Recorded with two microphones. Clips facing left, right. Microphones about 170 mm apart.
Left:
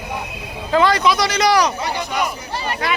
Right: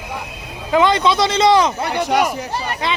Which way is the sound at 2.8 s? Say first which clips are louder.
Even; 20° right (ahead or behind).